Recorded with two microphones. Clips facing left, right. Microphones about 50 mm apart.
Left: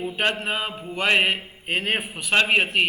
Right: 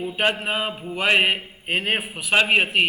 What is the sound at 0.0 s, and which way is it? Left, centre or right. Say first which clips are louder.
Mantra: right 2 dB; centre.